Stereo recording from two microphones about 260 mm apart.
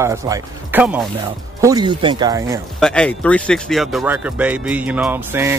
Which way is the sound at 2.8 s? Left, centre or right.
Centre.